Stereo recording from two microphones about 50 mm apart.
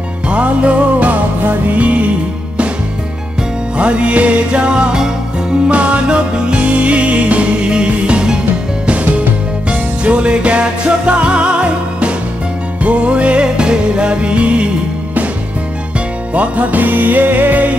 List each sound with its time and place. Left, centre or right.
0.3 s music: right
3.7 s music: right
9.7 s music: right
16.3 s music: right